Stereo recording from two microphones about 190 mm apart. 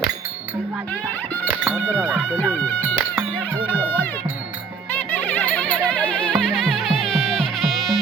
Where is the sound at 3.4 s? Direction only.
10° left (ahead or behind).